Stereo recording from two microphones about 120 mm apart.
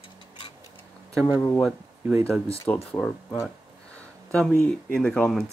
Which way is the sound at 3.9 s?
5° left (ahead or behind).